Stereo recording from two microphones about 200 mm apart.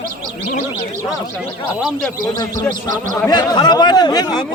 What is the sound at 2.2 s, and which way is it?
Speech, 45° right (ahead or behind).